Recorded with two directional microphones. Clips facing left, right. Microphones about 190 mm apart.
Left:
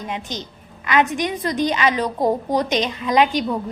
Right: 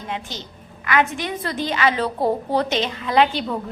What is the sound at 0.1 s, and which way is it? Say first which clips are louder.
A woman's voice: left 2 dB; 20° left (ahead or behind).